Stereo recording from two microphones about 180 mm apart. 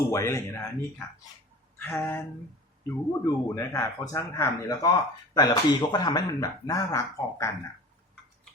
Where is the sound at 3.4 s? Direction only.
15° left (ahead or behind).